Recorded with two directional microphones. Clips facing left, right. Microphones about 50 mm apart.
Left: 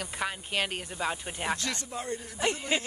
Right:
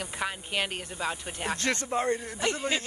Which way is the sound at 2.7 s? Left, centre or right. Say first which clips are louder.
Left 1 dB; left.